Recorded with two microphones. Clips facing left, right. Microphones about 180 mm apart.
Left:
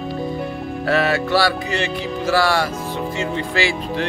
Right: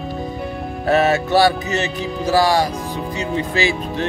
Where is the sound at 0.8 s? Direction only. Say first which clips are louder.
Right 3 dB; 20° right (ahead or behind).